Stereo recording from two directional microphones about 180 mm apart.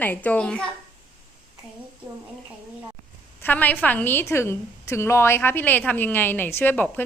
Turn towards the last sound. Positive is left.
turn(degrees=10)  # may be behind; listen again after turning